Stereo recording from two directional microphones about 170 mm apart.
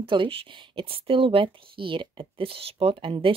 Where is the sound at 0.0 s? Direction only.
30° right (ahead or behind).